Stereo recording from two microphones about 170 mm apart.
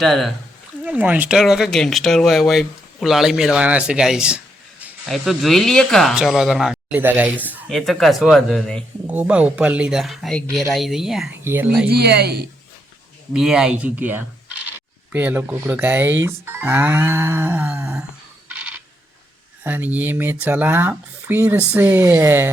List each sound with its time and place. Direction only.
0.0 s speech: centre (ahead or behind)
7.7 s speech: centre (ahead or behind)
9.0 s speech: 10° right (ahead or behind)
11.9 s speech: 70° right (ahead or behind)
13.3 s speech: 5° right (ahead or behind)
18.4 s coin: 10° right (ahead or behind)
19.6 s speech: 10° right (ahead or behind)